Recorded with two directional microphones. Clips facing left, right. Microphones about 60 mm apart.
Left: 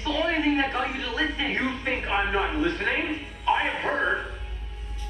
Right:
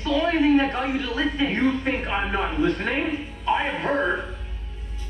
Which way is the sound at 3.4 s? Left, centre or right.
Centre.